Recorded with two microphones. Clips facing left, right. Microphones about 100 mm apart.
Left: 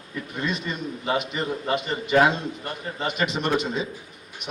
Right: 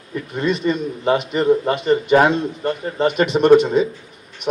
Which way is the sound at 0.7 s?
50° right (ahead or behind).